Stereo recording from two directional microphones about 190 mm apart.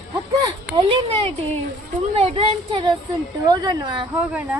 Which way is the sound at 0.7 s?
25° right (ahead or behind).